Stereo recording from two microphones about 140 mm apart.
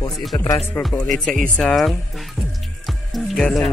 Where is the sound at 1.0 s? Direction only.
5° left (ahead or behind).